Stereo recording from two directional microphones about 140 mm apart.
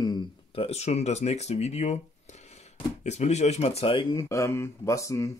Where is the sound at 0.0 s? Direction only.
30° left (ahead or behind).